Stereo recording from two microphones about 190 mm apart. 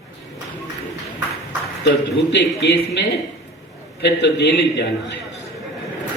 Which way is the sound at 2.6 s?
60° left (ahead or behind).